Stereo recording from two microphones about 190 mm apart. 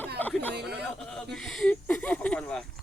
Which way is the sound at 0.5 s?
60° right (ahead or behind).